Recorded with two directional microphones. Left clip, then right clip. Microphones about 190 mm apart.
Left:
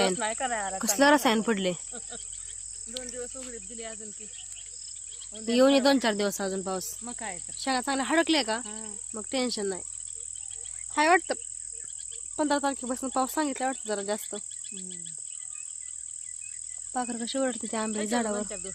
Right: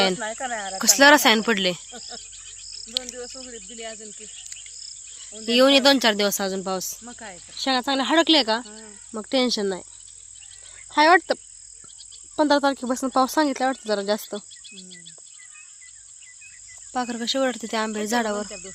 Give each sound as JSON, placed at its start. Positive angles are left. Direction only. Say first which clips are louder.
{"t": 0.3, "sound": "speech", "louder": "right 1 dB", "side_deg": -35}
{"t": 0.8, "sound": "speech", "louder": "right 8 dB", "side_deg": -15}
{"t": 1.9, "sound": "speech", "louder": "right 4 dB", "side_deg": -50}
{"t": 5.5, "sound": "speech", "louder": "right 6 dB", "side_deg": -10}
{"t": 7.0, "sound": "speech", "louder": "left 1 dB", "side_deg": -5}
{"t": 7.6, "sound": "speech", "louder": "right 6 dB", "side_deg": -45}
{"t": 8.6, "sound": "speech", "louder": "left 1 dB", "side_deg": -5}
{"t": 9.1, "sound": "speech", "louder": "right 8 dB", "side_deg": -40}
{"t": 10.9, "sound": "speech", "louder": "right 7 dB", "side_deg": -40}
{"t": 12.4, "sound": "speech", "louder": "right 8 dB", "side_deg": -50}
{"t": 14.8, "sound": "cricket", "louder": "even", "side_deg": 45}
{"t": 16.9, "sound": "speech", "louder": "right 6 dB", "side_deg": -40}